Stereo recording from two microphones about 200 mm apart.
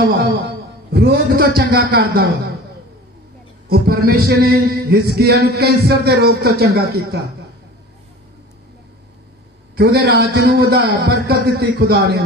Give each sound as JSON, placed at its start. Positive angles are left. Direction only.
{"t": 0.9, "sound": "a man's voice", "side_deg": -55}
{"t": 3.6, "sound": "a man's voice", "side_deg": -50}
{"t": 9.8, "sound": "a man's voice", "side_deg": -50}